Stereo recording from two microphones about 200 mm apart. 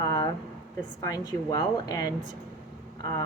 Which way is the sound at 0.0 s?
20° left (ahead or behind).